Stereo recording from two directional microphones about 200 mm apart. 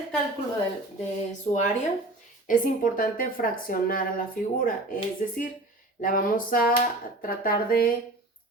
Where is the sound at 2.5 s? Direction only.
45° left (ahead or behind).